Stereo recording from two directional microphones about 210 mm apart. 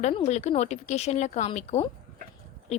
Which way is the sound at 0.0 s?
30° left (ahead or behind).